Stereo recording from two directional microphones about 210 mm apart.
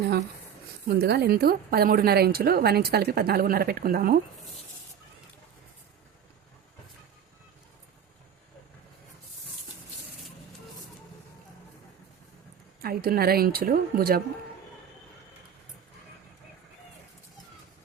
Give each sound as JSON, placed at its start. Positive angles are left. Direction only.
{"t": 0.9, "sound": "a woman's voice", "side_deg": -50}
{"t": 12.8, "sound": "a woman's voice", "side_deg": -45}